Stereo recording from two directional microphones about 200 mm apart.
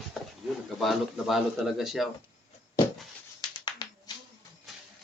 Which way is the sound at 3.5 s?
20° left (ahead or behind).